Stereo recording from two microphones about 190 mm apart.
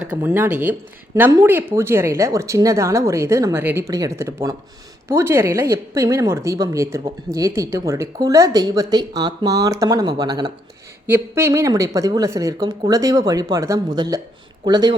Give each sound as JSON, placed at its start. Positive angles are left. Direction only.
{"t": 0.0, "sound": "speech", "side_deg": -10}